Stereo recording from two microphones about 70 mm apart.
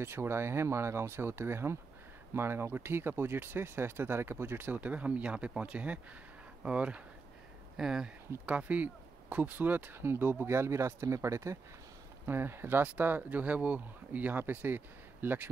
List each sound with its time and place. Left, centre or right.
0.0 s speech: right
12.3 s speech: right